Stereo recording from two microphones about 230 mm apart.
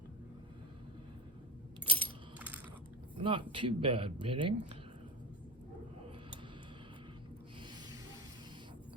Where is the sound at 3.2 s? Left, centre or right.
Right.